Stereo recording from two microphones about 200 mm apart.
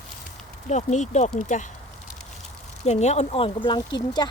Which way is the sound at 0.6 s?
35° left (ahead or behind).